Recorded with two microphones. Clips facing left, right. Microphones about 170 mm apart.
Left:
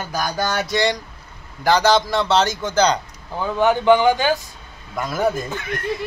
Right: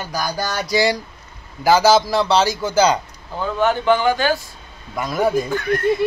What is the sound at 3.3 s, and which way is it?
Speech, 15° left (ahead or behind).